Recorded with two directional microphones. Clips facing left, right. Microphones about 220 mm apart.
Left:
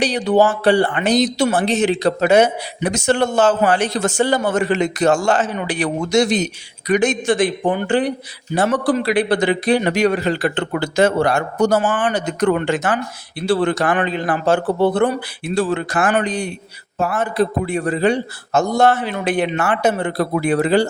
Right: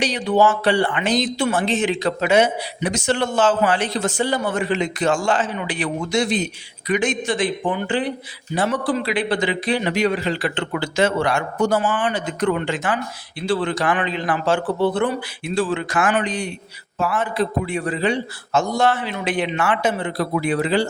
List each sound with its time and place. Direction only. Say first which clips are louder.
0.3 s speech: left 3 dB; 40° left (ahead or behind)